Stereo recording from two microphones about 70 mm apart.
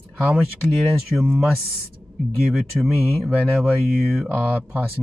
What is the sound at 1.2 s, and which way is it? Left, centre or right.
Speech, centre.